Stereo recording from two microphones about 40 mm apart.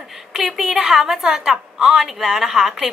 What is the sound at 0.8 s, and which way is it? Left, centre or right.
A woman's voice, centre.